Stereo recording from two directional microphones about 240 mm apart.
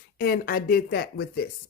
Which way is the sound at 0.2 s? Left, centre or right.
Left.